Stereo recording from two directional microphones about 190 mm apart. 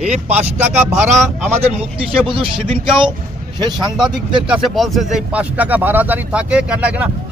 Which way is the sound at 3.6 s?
20° right (ahead or behind).